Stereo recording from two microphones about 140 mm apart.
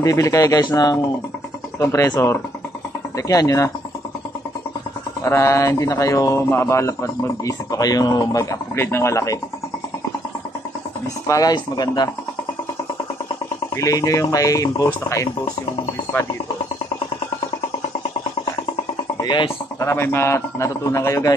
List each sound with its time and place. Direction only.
0.0 s a man's voice: 25° left (ahead or behind)
5.2 s a man's voice: 20° left (ahead or behind)
11.2 s a man's voice: 25° left (ahead or behind)
13.7 s a man's voice: 25° left (ahead or behind)
19.2 s speech: 35° left (ahead or behind)
19.8 s a man's voice: 20° left (ahead or behind)